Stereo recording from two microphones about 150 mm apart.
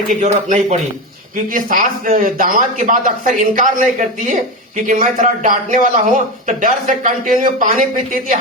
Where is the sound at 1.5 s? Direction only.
65° right (ahead or behind).